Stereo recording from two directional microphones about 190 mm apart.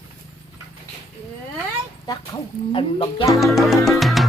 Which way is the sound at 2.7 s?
25° left (ahead or behind).